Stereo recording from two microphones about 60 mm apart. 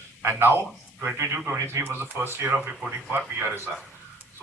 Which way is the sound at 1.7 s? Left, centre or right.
Right.